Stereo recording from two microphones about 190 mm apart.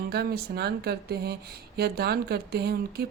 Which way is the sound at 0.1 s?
55° right (ahead or behind).